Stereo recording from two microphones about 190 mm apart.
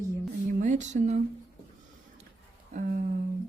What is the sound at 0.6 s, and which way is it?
Speech, 40° right (ahead or behind).